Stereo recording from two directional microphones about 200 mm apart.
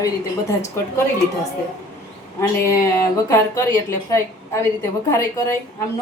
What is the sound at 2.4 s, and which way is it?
Speech, 15° left (ahead or behind).